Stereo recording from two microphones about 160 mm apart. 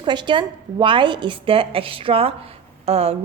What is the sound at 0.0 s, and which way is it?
Speech, 30° right (ahead or behind).